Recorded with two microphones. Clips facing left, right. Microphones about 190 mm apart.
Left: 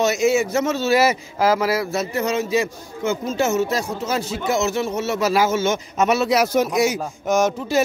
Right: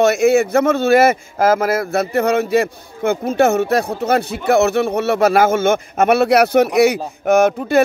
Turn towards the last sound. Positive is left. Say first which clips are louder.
# right 5 dB
turn(degrees=-60)  # may be behind; listen again after turning